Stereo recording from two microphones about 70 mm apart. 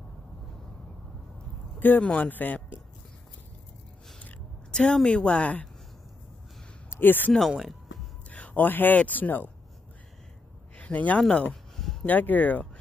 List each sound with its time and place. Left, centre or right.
1.8 s speech: left
4.2 s a sound: centre
5.0 s speech: centre
6.9 s speech: left
7.3 s a sound: centre
8.3 s speech: left
10.8 s speech: left
11.7 s a sound: centre
12.0 s speech: left